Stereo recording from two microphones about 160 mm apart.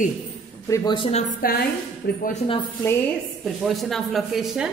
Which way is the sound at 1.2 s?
70° left (ahead or behind).